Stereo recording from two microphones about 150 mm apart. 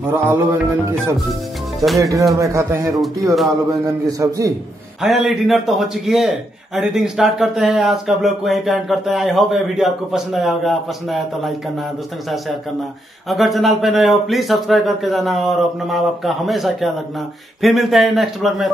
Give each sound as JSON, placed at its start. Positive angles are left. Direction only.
{"t": 0.0, "sound": "music", "side_deg": -15}
{"t": 2.0, "sound": "speech", "side_deg": -20}
{"t": 5.0, "sound": "a man's voice", "side_deg": 0}
{"t": 13.3, "sound": "a man's voice", "side_deg": 0}